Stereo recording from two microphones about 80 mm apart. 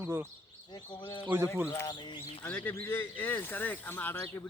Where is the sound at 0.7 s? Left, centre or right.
Left.